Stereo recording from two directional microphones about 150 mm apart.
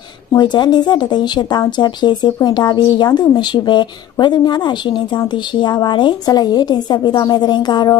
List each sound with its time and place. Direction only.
0.3 s speech: 30° left (ahead or behind)